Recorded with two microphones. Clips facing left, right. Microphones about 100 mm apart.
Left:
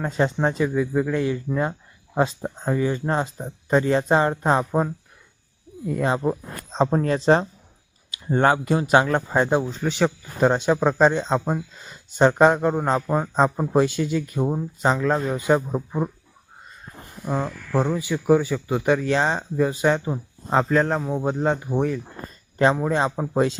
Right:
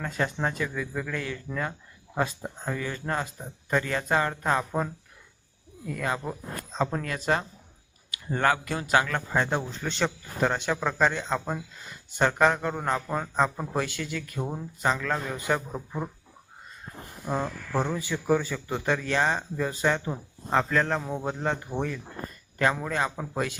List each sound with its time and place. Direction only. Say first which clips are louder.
0.0 s speech: left 7 dB; 25° left (ahead or behind)
17.2 s speech: left 4 dB; 10° left (ahead or behind)
22.5 s speech: left 7 dB; 25° left (ahead or behind)